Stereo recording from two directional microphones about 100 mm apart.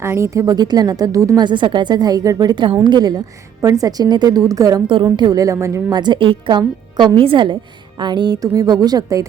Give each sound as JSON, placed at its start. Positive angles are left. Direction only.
{"t": 0.0, "sound": "a woman's voice", "side_deg": -25}
{"t": 1.5, "sound": "a woman's voice", "side_deg": -50}
{"t": 5.9, "sound": "a woman's voice", "side_deg": -50}
{"t": 7.2, "sound": "a woman's voice", "side_deg": -60}